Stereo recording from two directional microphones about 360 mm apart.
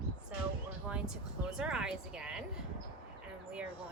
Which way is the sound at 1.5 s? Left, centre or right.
Centre.